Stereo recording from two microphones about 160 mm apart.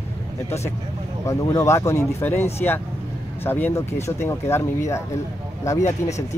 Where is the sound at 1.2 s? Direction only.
20° left (ahead or behind).